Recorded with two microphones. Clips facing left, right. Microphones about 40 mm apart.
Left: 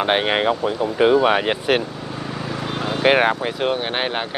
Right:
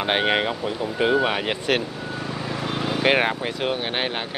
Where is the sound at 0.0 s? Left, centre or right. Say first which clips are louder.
Left 3 dB; centre.